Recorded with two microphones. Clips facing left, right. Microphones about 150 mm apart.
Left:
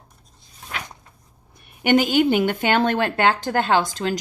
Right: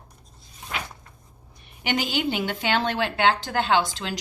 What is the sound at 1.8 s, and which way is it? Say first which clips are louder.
A woman's voice: left 9 dB; 50° left (ahead or behind).